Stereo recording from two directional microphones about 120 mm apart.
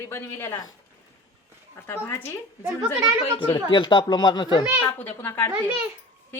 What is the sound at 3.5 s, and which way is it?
Speech, 40° left (ahead or behind).